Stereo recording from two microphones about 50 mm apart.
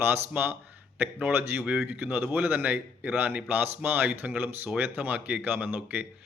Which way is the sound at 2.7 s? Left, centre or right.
Right.